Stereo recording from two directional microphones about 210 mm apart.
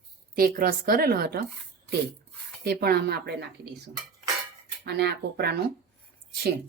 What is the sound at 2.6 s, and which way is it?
Speech, 50° right (ahead or behind).